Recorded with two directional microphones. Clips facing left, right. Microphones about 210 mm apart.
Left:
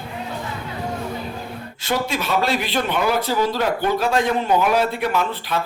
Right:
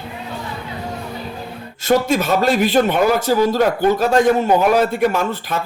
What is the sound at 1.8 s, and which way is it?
Speech, 45° right (ahead or behind).